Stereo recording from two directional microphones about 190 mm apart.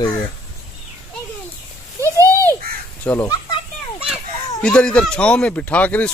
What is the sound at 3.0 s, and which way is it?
A child's voice, 10° left (ahead or behind).